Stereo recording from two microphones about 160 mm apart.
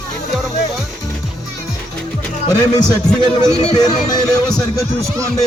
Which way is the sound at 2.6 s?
25° left (ahead or behind).